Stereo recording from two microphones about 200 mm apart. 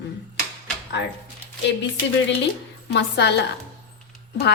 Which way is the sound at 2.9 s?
60° left (ahead or behind).